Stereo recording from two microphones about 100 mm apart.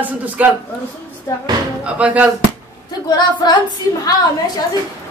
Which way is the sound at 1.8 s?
10° right (ahead or behind).